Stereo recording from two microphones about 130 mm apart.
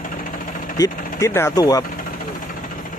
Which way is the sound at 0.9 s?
90° left.